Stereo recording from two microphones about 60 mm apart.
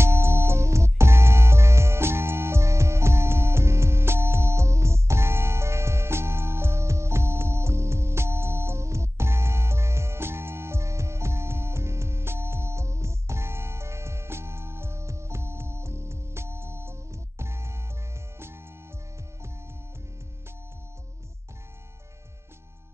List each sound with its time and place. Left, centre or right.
0.0 s music: right